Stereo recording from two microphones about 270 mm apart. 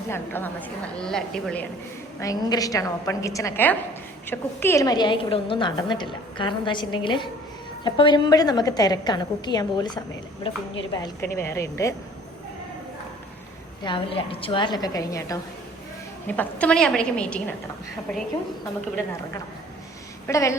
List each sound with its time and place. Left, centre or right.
0.1 s a woman's voice: centre
2.2 s a woman's voice: centre
13.8 s a woman's voice: centre
20.2 s a woman's voice: centre